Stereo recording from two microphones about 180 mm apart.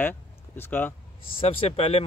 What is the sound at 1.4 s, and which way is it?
Speech, 30° left (ahead or behind).